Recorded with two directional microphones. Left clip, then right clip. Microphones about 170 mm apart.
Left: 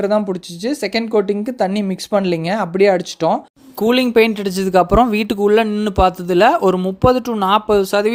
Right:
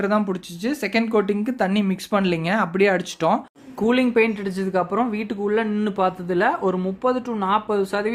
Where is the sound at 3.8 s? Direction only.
40° left (ahead or behind).